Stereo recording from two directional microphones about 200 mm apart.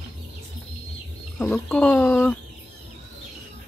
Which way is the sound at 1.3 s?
5° left (ahead or behind).